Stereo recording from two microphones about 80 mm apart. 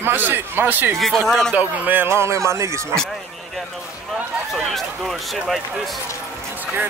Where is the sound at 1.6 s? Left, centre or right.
Right.